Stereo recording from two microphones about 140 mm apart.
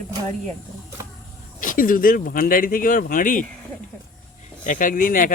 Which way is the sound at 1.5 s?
75° left (ahead or behind).